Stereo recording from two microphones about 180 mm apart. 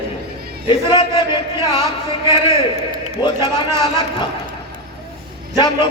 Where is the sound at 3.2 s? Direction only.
10° right (ahead or behind).